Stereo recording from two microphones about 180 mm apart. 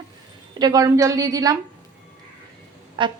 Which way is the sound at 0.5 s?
20° right (ahead or behind).